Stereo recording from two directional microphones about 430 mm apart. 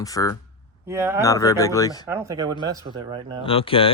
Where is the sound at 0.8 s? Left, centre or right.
Centre.